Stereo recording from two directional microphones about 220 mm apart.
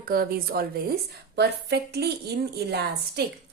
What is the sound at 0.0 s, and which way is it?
A woman's voice, 40° right (ahead or behind).